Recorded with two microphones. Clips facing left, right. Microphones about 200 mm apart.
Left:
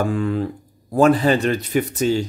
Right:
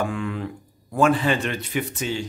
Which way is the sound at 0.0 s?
35° left (ahead or behind).